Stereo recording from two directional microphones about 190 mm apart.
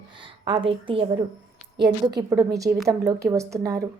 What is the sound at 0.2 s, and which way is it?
A woman's voice, 25° right (ahead or behind).